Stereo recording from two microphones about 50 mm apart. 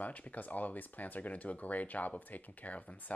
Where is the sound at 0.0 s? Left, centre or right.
Left.